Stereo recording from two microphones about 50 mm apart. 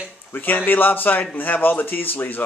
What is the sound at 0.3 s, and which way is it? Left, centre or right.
Speech, left.